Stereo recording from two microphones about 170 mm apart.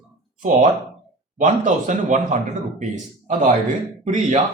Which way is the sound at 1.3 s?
50° right (ahead or behind).